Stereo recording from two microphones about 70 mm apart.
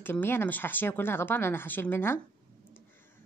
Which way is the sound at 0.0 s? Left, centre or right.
Left.